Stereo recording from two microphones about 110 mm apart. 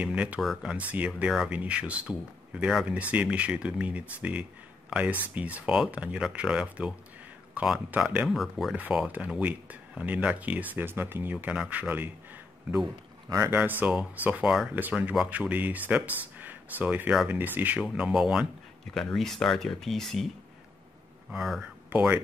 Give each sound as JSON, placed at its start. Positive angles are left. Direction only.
{"t": 0.0, "sound": "speech", "side_deg": -10}
{"t": 0.4, "sound": "speech", "side_deg": 0}
{"t": 0.7, "sound": "speech", "side_deg": -10}
{"t": 8.3, "sound": "speech", "side_deg": 0}
{"t": 8.7, "sound": "speech", "side_deg": -15}
{"t": 13.3, "sound": "speech", "side_deg": -30}
{"t": 13.6, "sound": "speech", "side_deg": -15}
{"t": 17.8, "sound": "speech", "side_deg": -5}
{"t": 21.3, "sound": "speech", "side_deg": 0}
{"t": 21.9, "sound": "speech", "side_deg": -15}